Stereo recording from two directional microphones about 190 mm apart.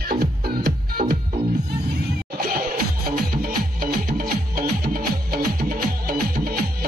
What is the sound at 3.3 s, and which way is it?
Music, 50° right (ahead or behind).